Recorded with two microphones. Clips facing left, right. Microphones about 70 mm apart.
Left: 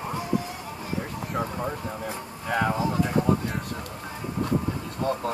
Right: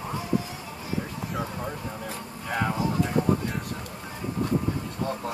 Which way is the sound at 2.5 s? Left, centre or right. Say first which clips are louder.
Left 3 dB; left.